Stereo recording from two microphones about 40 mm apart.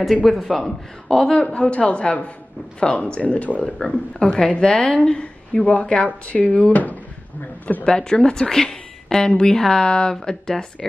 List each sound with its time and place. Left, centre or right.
0.2 s speech: centre
1.3 s a woman's voice: left
3.7 s a woman's voice: left
5.6 s speech: left
7.8 s speech: centre